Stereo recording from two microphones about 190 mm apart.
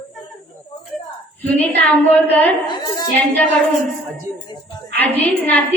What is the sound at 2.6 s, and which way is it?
Speech, 20° left (ahead or behind).